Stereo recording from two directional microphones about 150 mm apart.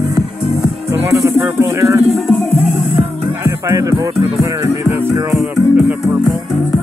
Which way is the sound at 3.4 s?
20° right (ahead or behind).